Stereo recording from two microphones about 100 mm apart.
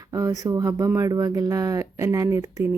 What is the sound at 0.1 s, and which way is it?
A woman's voice, 35° right (ahead or behind).